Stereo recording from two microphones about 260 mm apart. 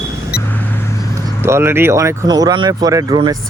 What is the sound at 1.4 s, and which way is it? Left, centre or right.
Speech, centre.